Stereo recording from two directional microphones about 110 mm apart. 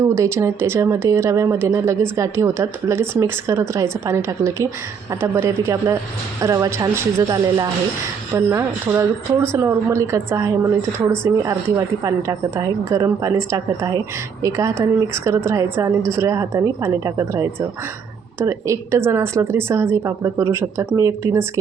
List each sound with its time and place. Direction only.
0.0 s speech: 25° right (ahead or behind)
12.0 s a woman's voice: 30° right (ahead or behind)